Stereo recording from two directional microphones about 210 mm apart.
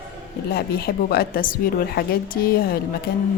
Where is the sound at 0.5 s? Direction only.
45° left (ahead or behind).